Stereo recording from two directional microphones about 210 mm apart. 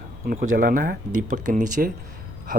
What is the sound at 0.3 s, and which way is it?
A man's voice, 40° right (ahead or behind).